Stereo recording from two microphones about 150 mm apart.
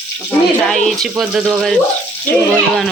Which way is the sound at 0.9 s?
Centre (ahead or behind).